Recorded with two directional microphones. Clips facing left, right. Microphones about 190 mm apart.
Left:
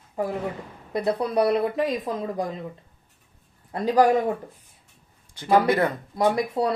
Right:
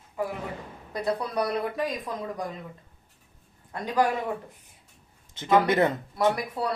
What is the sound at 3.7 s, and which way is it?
Speech, 35° left (ahead or behind).